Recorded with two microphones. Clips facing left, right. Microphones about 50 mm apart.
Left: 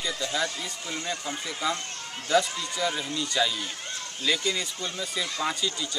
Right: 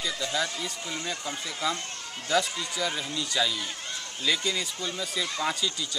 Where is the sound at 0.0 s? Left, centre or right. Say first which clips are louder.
Left 1 dB; centre.